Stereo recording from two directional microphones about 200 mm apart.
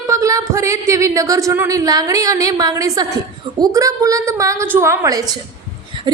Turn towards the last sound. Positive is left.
turn(degrees=-20)  # may be behind; listen again after turning